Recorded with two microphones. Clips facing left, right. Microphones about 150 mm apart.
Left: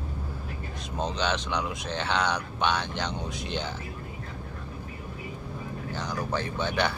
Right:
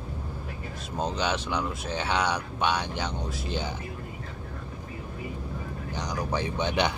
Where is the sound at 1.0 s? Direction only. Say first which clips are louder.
Even; 10° right (ahead or behind).